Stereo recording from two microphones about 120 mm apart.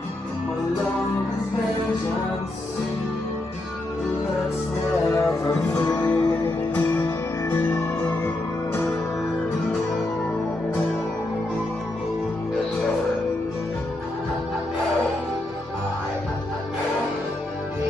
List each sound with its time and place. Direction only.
5.0 s music: 25° left (ahead or behind)
5.5 s music: 10° left (ahead or behind)